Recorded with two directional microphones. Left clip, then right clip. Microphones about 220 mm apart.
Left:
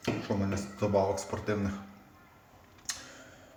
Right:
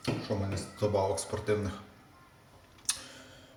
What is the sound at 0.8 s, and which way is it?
Speech, 5° left (ahead or behind).